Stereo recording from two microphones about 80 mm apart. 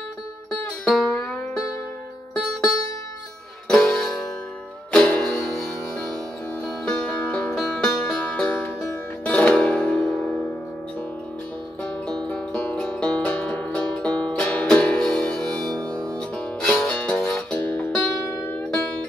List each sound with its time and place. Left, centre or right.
0.5 s music: centre
3.6 s music: centre
6.9 s music: centre
11.8 s music: centre